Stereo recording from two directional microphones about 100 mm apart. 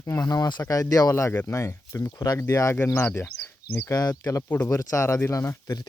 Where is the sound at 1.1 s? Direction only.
25° left (ahead or behind).